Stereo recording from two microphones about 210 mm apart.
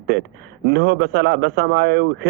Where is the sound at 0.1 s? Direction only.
50° right (ahead or behind).